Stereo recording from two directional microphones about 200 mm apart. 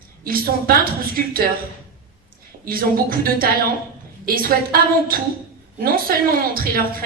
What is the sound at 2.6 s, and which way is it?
A woman's voice, 45° right (ahead or behind).